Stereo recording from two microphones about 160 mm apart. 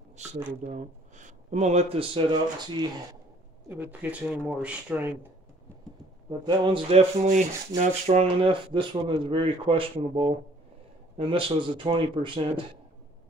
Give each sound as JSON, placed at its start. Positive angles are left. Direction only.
{"t": 0.7, "sound": "speech", "side_deg": -50}
{"t": 3.6, "sound": "speech", "side_deg": -10}
{"t": 6.4, "sound": "speech", "side_deg": -30}